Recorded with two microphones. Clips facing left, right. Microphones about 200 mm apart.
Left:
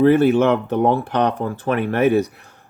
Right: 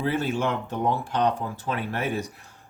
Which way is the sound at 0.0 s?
65° left (ahead or behind).